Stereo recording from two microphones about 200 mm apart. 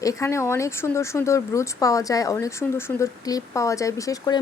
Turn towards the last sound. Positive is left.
turn(degrees=20)  # may be behind; listen again after turning